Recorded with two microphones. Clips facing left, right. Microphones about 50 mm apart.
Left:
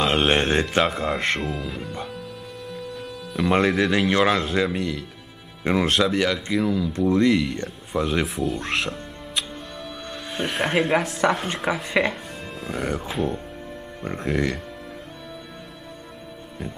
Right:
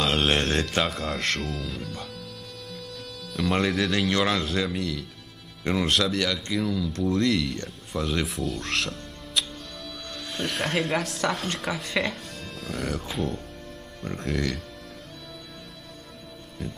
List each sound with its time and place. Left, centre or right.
0.0 s speech: centre
2.7 s music: left
3.7 s speech: centre
5.6 s speech: left
5.9 s speech: centre
14.0 s speech: centre